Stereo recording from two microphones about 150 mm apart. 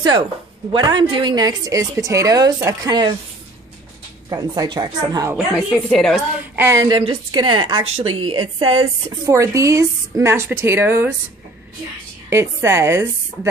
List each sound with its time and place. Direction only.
0.7 s a woman's voice: 30° right (ahead or behind)
4.3 s a woman's voice: 25° right (ahead or behind)
5.6 s a woman's voice: 5° left (ahead or behind)
6.5 s a woman's voice: 15° right (ahead or behind)
6.9 s a woman's voice: 30° right (ahead or behind)
9.3 s a woman's voice: 20° right (ahead or behind)
12.3 s a woman's voice: 15° right (ahead or behind)